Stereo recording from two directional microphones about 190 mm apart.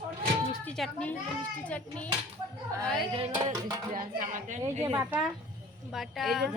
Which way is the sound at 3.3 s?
20° right (ahead or behind).